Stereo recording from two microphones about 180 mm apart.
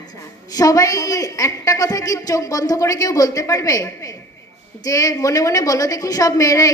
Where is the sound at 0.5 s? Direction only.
20° left (ahead or behind).